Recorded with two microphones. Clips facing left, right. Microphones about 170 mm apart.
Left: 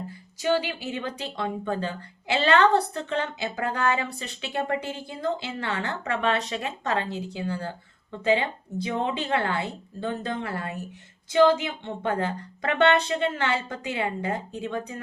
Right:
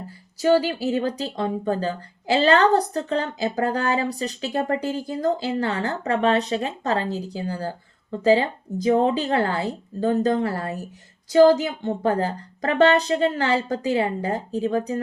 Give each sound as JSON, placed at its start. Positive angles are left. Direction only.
{"t": 0.4, "sound": "speech", "side_deg": -40}